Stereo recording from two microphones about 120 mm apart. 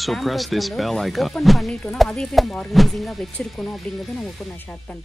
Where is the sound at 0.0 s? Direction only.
Centre (ahead or behind).